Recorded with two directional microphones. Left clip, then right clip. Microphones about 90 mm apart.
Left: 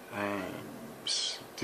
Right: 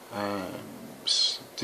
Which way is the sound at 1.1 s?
15° right (ahead or behind).